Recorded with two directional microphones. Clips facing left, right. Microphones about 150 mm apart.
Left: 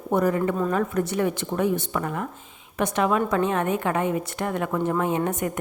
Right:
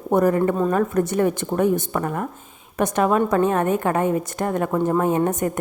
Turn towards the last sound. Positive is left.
turn(degrees=-45)  # may be behind; listen again after turning